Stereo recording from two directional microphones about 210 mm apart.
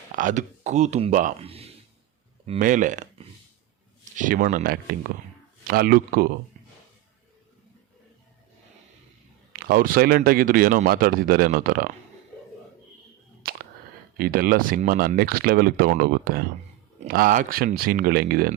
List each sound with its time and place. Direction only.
0.2 s speech: 35° right (ahead or behind)
9.5 s speech: 45° right (ahead or behind)
13.5 s a sound: 45° right (ahead or behind)
14.2 s speech: 45° right (ahead or behind)